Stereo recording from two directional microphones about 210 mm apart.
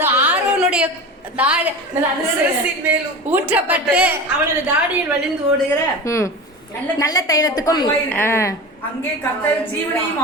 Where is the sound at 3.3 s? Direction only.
10° right (ahead or behind).